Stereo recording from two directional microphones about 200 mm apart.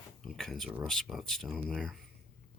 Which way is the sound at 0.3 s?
Centre (ahead or behind).